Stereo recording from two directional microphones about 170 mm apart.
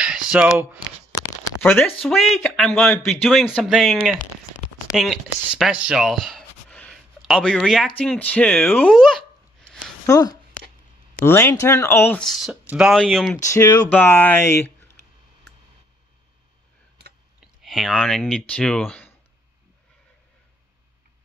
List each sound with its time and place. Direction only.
0.0 s a sound: 5° right (ahead or behind)
1.1 s a sound: 20° left (ahead or behind)
1.6 s a man's voice: 5° left (ahead or behind)
10.0 s speech: 20° left (ahead or behind); by 13.4 s centre (ahead or behind)
13.5 s speech: 20° left (ahead or behind)
17.6 s speech: centre (ahead or behind)